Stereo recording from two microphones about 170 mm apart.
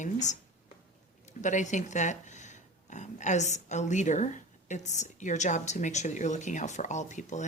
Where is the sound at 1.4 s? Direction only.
45° left (ahead or behind).